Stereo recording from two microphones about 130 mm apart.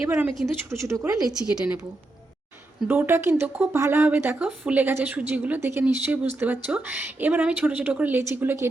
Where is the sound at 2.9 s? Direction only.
15° right (ahead or behind).